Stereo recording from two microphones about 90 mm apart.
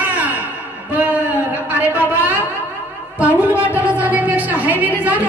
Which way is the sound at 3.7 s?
20° right (ahead or behind).